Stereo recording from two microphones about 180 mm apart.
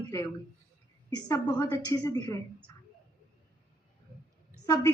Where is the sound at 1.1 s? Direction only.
20° left (ahead or behind).